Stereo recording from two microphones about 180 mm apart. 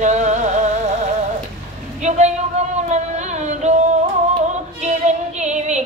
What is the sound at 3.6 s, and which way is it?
Music, 40° right (ahead or behind).